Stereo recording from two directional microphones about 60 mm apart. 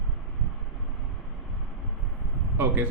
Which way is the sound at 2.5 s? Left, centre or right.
Right.